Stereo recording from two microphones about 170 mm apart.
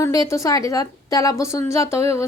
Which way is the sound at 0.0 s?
20° left (ahead or behind).